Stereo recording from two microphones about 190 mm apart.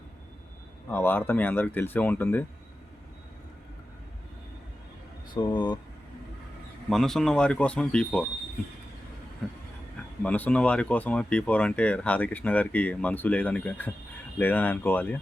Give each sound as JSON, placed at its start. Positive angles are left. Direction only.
{"t": 0.9, "sound": "speech", "side_deg": 10}
{"t": 5.3, "sound": "speech", "side_deg": 25}
{"t": 6.9, "sound": "speech", "side_deg": 0}
{"t": 10.2, "sound": "speech", "side_deg": 10}